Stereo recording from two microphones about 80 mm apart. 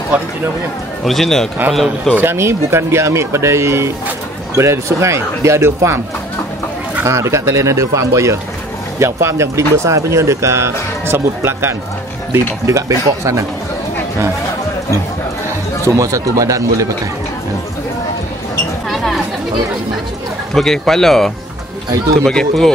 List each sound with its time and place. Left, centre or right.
1.0 s speech: centre
2.1 s speech: right
7.1 s speech: right
12.6 s speech: right
15.8 s a man's voice: right
18.9 s chatter: centre
20.5 s speech: centre